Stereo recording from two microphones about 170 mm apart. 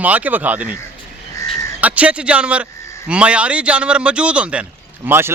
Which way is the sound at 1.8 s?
10° right (ahead or behind).